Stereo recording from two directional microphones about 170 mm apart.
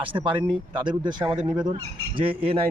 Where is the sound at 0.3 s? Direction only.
25° right (ahead or behind).